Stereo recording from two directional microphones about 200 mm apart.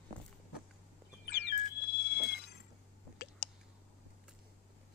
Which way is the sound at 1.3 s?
55° left (ahead or behind).